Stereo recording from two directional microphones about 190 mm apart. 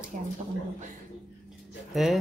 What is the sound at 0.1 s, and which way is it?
Speech, 40° right (ahead or behind).